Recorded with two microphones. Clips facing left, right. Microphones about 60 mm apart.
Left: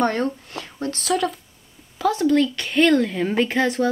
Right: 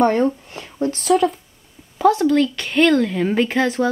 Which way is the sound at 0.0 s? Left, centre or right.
Centre.